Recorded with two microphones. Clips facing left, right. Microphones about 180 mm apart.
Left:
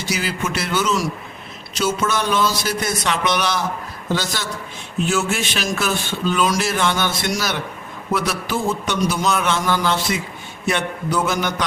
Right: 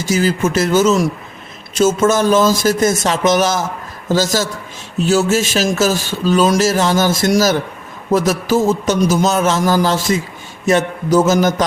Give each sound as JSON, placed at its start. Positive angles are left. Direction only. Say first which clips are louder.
{"t": 0.1, "sound": "speech", "louder": "right 9 dB", "side_deg": -45}